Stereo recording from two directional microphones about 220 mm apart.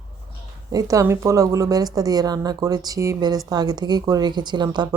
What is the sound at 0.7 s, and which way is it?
Speech, 15° right (ahead or behind).